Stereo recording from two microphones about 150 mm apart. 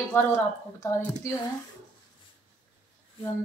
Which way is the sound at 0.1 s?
15° left (ahead or behind).